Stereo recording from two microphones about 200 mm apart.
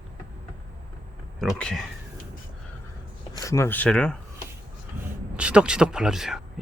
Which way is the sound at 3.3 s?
15° left (ahead or behind).